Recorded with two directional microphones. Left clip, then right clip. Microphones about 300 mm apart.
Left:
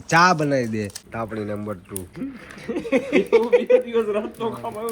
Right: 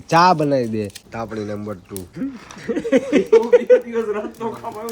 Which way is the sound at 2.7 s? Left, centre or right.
Right.